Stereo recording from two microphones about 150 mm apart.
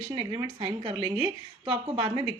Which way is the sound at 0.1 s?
30° right (ahead or behind).